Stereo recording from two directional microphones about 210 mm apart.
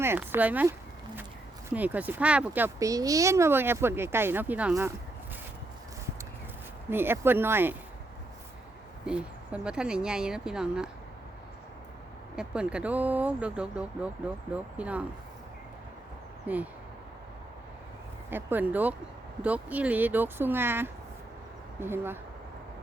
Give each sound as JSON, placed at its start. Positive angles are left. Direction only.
{"t": 0.0, "sound": "speech", "side_deg": -10}
{"t": 1.7, "sound": "speech", "side_deg": -10}
{"t": 6.9, "sound": "speech", "side_deg": -10}
{"t": 9.0, "sound": "speech", "side_deg": -5}
{"t": 12.4, "sound": "speech", "side_deg": -5}
{"t": 16.5, "sound": "speech", "side_deg": -5}
{"t": 18.3, "sound": "speech", "side_deg": -10}